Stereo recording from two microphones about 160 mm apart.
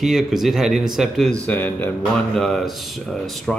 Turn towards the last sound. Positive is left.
turn(degrees=5)  # may be behind; listen again after turning